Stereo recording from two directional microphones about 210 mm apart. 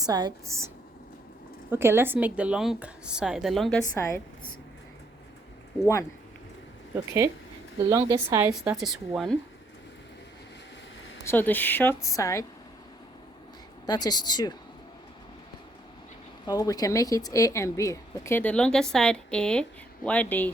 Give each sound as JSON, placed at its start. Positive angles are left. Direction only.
{"t": 0.0, "sound": "a woman's voice", "side_deg": -20}
{"t": 1.7, "sound": "speech", "side_deg": -10}
{"t": 3.9, "sound": "a woman's voice", "side_deg": 15}
{"t": 5.8, "sound": "a woman's voice", "side_deg": 15}
{"t": 6.9, "sound": "a woman's voice", "side_deg": -15}
{"t": 8.7, "sound": "speech", "side_deg": 0}
{"t": 11.3, "sound": "a woman's voice", "side_deg": 10}
{"t": 13.8, "sound": "a woman's voice", "side_deg": 20}
{"t": 16.5, "sound": "a woman's voice", "side_deg": 15}